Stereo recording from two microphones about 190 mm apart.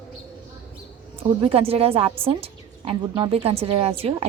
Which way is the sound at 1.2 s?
30° right (ahead or behind).